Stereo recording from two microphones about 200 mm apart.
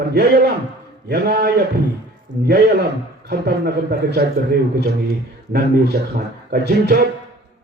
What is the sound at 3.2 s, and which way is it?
A man's voice, 55° right (ahead or behind).